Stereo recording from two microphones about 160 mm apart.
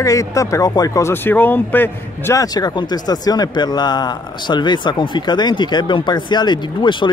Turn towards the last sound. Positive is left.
turn(degrees=30)  # may be behind; listen again after turning